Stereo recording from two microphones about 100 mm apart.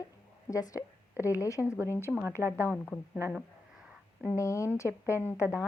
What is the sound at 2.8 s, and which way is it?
Speech, 5° left (ahead or behind).